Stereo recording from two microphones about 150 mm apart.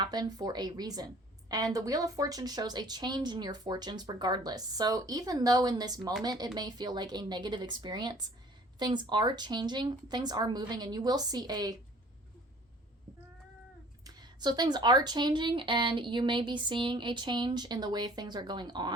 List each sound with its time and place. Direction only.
0.0 s a woman's voice: 25° right (ahead or behind)
14.0 s speech: 25° right (ahead or behind)